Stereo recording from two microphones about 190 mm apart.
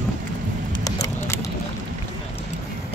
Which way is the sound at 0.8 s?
15° left (ahead or behind).